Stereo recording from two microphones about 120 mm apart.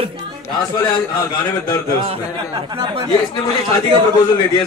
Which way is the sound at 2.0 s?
40° right (ahead or behind).